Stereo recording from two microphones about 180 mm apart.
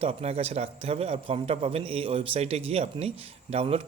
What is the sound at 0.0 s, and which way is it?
A man's voice, 35° right (ahead or behind).